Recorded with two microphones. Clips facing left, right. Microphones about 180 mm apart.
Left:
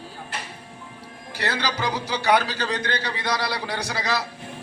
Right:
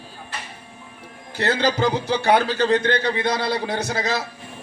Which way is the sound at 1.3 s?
50° right (ahead or behind).